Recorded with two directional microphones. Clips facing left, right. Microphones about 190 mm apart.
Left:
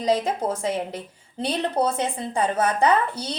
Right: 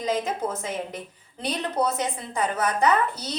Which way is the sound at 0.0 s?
35° left (ahead or behind).